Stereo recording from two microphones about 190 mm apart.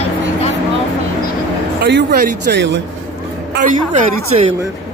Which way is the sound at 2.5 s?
50° right (ahead or behind).